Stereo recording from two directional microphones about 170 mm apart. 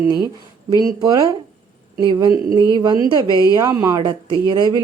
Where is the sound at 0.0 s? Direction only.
25° right (ahead or behind).